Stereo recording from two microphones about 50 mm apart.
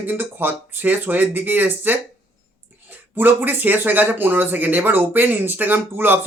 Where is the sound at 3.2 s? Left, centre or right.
Right.